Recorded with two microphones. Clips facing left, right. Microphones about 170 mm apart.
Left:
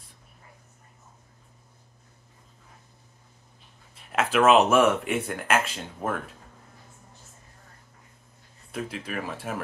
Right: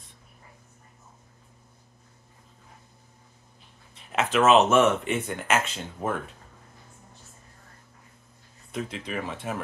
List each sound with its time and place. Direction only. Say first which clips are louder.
4.1 s speech: even; centre (ahead or behind)
8.7 s speech: even; 5° left (ahead or behind)